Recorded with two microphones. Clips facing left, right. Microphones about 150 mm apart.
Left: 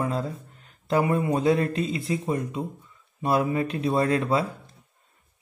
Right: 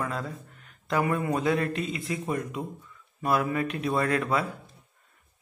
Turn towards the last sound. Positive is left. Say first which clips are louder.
# left 3 dB
turn(degrees=30)  # may be behind; listen again after turning